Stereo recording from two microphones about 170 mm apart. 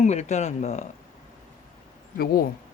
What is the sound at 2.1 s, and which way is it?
Speech, 60° left (ahead or behind).